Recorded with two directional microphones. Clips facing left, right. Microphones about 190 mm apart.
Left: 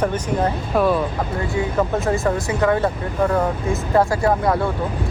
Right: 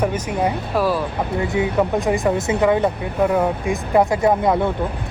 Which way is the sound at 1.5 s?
15° right (ahead or behind).